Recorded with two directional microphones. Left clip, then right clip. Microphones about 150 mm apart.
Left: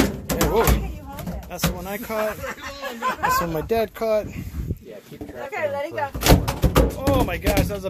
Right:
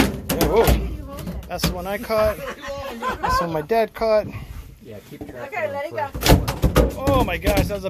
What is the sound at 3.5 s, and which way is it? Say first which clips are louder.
Speech: right 3 dB; 10° left (ahead or behind).